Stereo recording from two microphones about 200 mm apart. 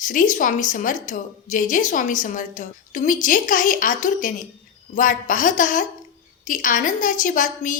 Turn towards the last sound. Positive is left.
turn(degrees=40)  # may be behind; listen again after turning